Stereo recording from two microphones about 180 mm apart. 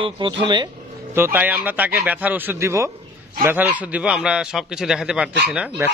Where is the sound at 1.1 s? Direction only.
10° right (ahead or behind).